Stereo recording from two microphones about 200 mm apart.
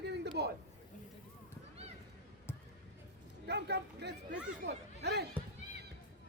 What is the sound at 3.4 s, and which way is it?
Speech, 55° right (ahead or behind).